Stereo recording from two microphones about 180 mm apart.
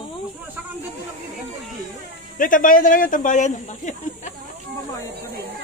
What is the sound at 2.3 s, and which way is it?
Speech, 50° left (ahead or behind).